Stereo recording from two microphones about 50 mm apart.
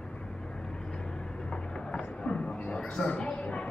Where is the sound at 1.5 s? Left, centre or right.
Centre.